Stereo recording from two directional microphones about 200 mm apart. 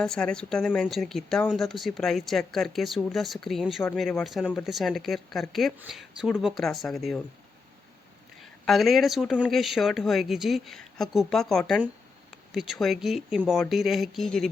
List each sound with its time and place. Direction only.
0.0 s speech: 5° left (ahead or behind)
8.4 s speech: centre (ahead or behind)